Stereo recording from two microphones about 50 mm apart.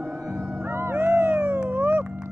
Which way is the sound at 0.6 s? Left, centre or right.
Right.